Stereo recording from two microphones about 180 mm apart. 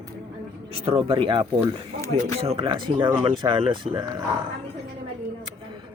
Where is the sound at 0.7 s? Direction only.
30° right (ahead or behind).